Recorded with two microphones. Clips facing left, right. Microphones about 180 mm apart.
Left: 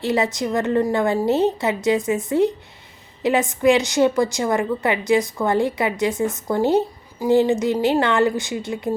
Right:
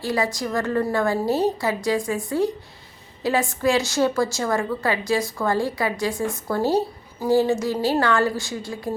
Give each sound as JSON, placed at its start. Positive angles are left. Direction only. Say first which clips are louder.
{"t": 0.0, "sound": "a woman's voice", "louder": "left 3 dB", "side_deg": 20}